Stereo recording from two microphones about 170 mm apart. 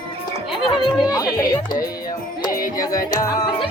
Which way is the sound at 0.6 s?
25° left (ahead or behind).